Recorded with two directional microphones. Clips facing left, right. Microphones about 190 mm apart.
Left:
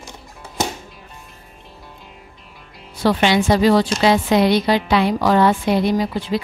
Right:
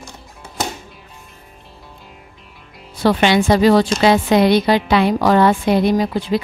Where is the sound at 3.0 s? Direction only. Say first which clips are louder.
Right 2 dB; 55° right (ahead or behind).